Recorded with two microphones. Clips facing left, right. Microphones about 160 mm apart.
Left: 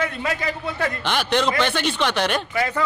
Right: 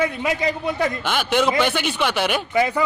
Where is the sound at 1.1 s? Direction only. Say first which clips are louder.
Even; 5° right (ahead or behind).